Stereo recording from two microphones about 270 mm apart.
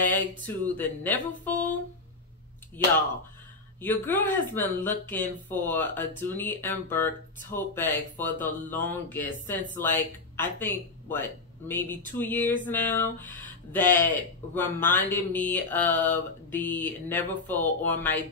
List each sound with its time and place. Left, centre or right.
0.5 s speech: centre
3.8 s speech: centre